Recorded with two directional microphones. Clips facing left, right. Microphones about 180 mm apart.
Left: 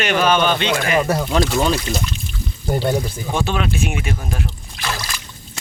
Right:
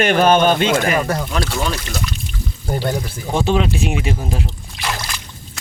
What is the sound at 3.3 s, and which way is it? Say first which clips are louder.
Speech: right 4 dB; 25° right (ahead or behind).